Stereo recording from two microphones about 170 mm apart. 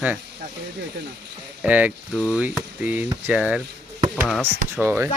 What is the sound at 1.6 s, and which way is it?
Speech, 10° right (ahead or behind).